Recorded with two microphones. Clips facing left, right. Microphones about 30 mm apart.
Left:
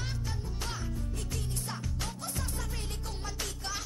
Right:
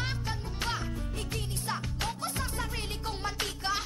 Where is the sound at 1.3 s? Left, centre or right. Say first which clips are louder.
Right 5 dB; right.